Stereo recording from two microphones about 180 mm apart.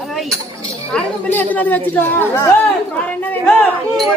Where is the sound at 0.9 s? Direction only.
10° left (ahead or behind).